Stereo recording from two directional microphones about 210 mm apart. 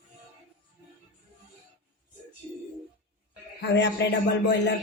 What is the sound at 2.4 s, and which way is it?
Music, 5° right (ahead or behind).